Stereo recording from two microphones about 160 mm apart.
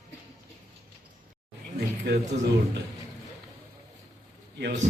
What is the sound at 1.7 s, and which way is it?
A man's voice, 85° right.